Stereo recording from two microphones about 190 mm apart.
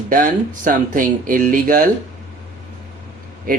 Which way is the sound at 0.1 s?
45° right (ahead or behind).